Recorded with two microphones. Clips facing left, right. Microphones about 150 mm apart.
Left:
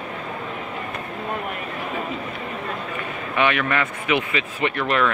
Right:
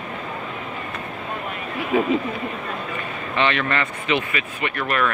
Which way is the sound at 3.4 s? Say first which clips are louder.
Left 1 dB; 10° left (ahead or behind).